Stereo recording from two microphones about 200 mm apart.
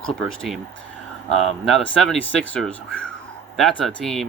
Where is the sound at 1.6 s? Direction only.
5° left (ahead or behind).